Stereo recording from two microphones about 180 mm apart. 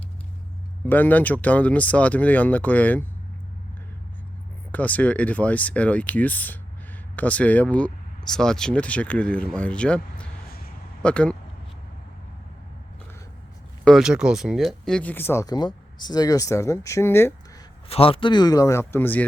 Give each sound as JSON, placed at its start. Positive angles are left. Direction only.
{"t": 0.9, "sound": "speech", "side_deg": 10}
{"t": 4.7, "sound": "speech", "side_deg": 10}
{"t": 13.8, "sound": "speech", "side_deg": 0}
{"t": 17.8, "sound": "speech", "side_deg": 30}